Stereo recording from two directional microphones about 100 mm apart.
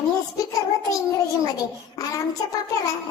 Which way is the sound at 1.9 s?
35° left (ahead or behind).